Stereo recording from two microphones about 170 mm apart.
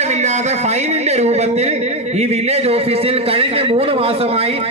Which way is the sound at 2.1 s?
40° right (ahead or behind).